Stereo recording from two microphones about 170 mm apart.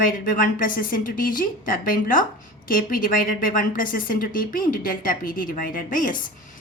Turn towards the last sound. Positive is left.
turn(degrees=55)  # may be behind; listen again after turning